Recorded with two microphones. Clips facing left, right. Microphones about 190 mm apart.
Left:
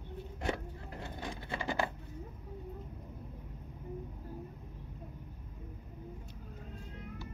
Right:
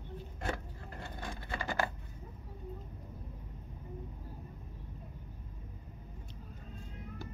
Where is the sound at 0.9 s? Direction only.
15° left (ahead or behind).